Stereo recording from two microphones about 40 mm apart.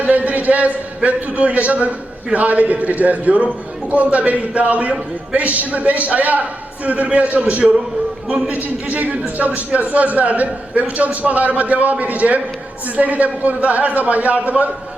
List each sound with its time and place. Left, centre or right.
0.0 s a man's voice: right